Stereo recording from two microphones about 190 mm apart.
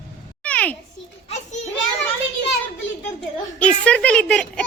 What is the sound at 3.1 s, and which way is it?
A woman's voice, 5° left (ahead or behind).